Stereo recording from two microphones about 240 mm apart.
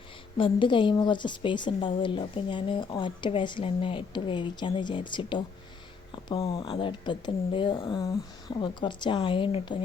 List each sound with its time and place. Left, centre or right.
0.3 s a woman's voice: left